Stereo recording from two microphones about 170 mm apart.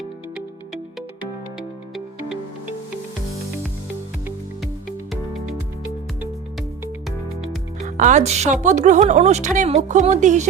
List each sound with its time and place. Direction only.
7.8 s speech: 45° right (ahead or behind)